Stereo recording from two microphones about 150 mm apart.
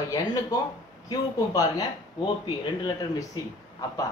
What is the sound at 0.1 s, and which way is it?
Speech, 25° left (ahead or behind).